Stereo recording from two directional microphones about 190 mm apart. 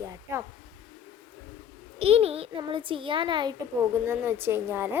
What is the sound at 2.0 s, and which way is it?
A child's voice, 30° right (ahead or behind).